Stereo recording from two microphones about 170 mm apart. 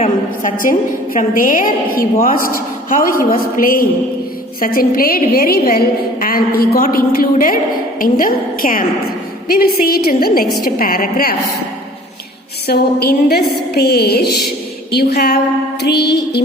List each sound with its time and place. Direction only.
0.0 s a woman's voice: 50° left (ahead or behind)
12.6 s a woman's voice: 70° left (ahead or behind)